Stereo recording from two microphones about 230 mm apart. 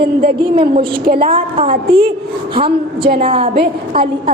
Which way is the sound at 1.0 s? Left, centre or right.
Right.